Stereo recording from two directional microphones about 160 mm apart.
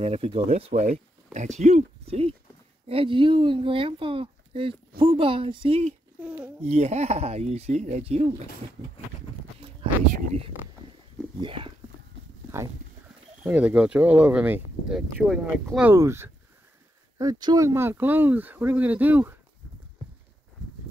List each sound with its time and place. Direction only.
0.0 s speech: 40° right (ahead or behind)
6.2 s a sound: 10° right (ahead or behind)
6.6 s speech: 40° right (ahead or behind)
11.4 s a sound: 30° right (ahead or behind)
13.4 s speech: 10° right (ahead or behind)
15.9 s speech: 15° right (ahead or behind)